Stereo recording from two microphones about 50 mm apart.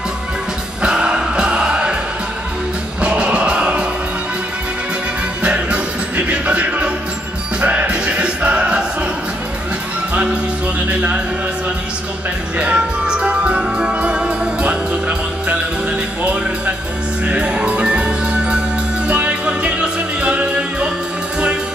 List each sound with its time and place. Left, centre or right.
0.8 s music: centre
3.0 s music: right
5.4 s music: right
10.1 s music: right
10.9 s speech: right
12.5 s music: right